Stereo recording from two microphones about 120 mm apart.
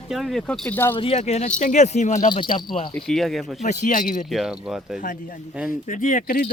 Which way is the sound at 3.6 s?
85° left.